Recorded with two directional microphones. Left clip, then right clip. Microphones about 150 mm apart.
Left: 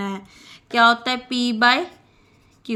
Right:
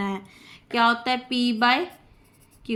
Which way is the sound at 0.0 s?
15° left (ahead or behind).